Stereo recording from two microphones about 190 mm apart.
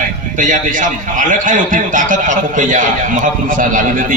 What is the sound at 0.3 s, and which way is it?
A man's voice, 40° right (ahead or behind).